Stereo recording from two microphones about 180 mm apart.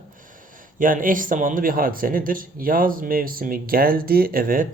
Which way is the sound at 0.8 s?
50° right (ahead or behind).